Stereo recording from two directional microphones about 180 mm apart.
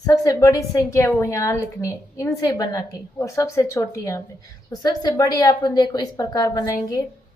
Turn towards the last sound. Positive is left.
turn(degrees=20)  # may be behind; listen again after turning